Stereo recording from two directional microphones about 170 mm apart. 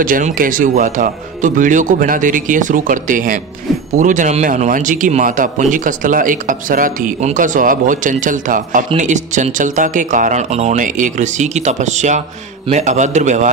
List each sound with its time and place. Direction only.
0.0 s a man's voice: 55° right (ahead or behind)